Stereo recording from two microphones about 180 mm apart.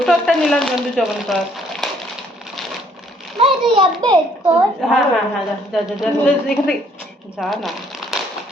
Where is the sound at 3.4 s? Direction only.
25° right (ahead or behind).